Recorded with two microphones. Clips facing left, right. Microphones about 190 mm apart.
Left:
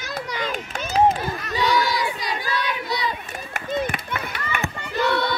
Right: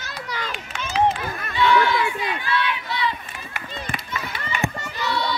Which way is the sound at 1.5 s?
40° left (ahead or behind).